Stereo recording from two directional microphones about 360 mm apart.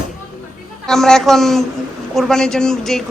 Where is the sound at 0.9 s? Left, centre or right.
Centre.